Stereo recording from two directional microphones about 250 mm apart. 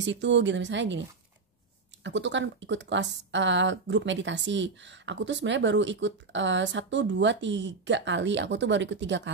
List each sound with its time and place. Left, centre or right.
0.0 s speech: right
2.0 s speech: right